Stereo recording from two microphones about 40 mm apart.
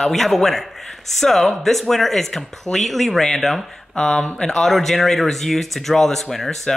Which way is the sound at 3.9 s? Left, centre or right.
Centre.